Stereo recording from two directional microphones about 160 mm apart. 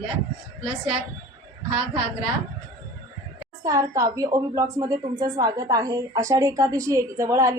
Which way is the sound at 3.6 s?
20° right (ahead or behind).